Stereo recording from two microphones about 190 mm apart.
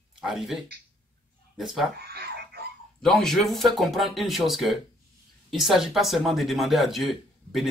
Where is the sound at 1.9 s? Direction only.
55° right (ahead or behind).